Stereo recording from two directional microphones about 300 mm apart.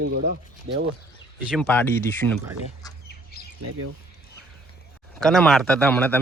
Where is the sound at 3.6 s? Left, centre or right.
Right.